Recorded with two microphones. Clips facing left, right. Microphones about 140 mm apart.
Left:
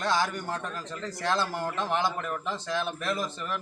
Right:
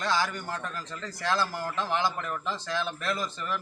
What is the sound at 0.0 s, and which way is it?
A man's voice, 15° left (ahead or behind).